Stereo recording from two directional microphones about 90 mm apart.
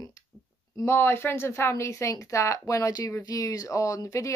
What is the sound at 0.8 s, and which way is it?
Speech, 25° left (ahead or behind).